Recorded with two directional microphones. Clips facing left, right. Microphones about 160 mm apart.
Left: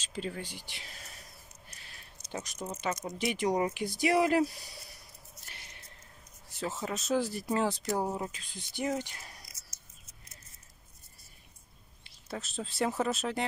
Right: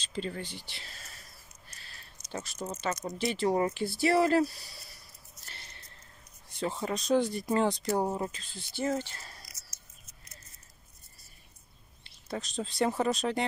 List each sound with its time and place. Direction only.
0.0 s speech: 10° left (ahead or behind)
1.7 s a sound: 15° left (ahead or behind)
2.3 s speech: 15° left (ahead or behind)
5.4 s a sound: 10° left (ahead or behind)
6.6 s speech: 5° left (ahead or behind)
12.0 s speech: 5° left (ahead or behind)